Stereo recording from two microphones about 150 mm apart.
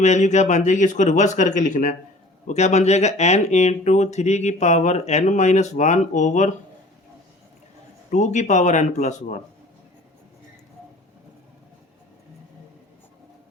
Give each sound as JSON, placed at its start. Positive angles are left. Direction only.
{"t": 0.0, "sound": "speech", "side_deg": 50}
{"t": 8.1, "sound": "speech", "side_deg": 50}